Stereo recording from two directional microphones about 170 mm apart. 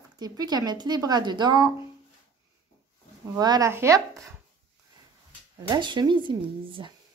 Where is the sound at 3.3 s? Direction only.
20° right (ahead or behind).